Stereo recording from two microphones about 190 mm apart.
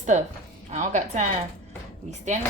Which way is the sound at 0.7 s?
35° right (ahead or behind).